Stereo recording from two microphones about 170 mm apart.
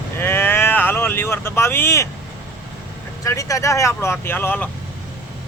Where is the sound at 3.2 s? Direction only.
20° left (ahead or behind).